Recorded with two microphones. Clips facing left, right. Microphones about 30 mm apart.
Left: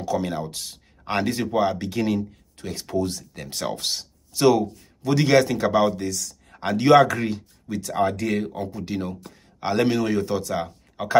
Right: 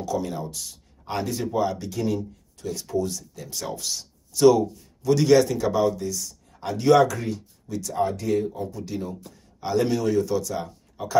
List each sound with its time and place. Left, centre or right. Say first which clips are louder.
0.2 s speech: left 3 dB; left
3.0 s speech: left 4 dB; left
4.3 s a man's voice: right 2 dB; left
5.9 s speech: left 2 dB; left
6.6 s speech: left 5 dB; left
6.9 s speech: left 2 dB; left
7.9 s speech: left 1 dB; left
8.7 s speech: left 3 dB; left